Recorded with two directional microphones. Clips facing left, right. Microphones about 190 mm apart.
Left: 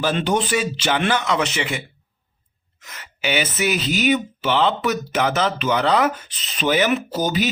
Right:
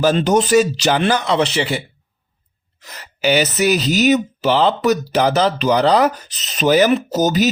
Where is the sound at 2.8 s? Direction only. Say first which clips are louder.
Right 7 dB; 35° right (ahead or behind).